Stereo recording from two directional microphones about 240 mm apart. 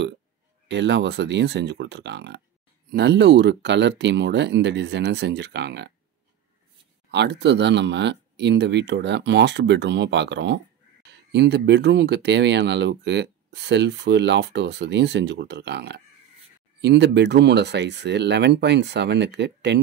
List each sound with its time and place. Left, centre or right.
0.7 s speech: right
7.1 s speech: right